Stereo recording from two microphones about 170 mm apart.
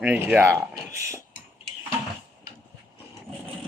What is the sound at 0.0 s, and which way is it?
Speech, 5° right (ahead or behind).